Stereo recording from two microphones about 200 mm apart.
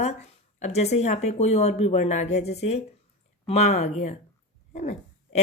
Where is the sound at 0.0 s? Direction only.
35° left (ahead or behind).